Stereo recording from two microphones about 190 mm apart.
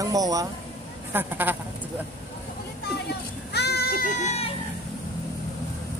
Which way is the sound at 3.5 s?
60° left (ahead or behind).